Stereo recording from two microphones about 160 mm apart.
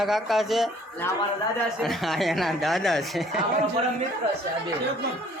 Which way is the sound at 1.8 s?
Centre (ahead or behind).